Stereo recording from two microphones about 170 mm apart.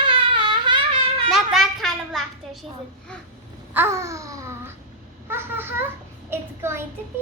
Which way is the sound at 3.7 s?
15° right (ahead or behind).